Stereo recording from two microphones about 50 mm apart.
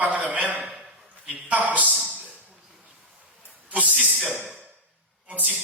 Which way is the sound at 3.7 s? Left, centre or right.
Right.